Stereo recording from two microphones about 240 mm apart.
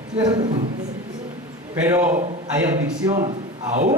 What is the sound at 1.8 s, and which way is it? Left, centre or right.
Speech, centre.